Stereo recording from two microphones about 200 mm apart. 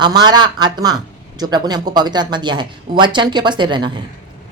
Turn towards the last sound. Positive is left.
turn(degrees=-25)  # may be behind; listen again after turning